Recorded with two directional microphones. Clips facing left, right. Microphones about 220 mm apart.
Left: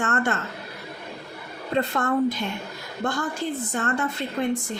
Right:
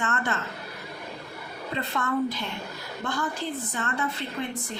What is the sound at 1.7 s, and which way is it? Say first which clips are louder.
A woman's voice: left 5 dB; 45° left (ahead or behind).